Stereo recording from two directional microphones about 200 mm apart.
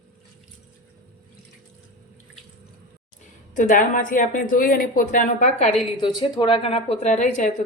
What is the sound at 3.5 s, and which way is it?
A woman's voice, 40° left (ahead or behind).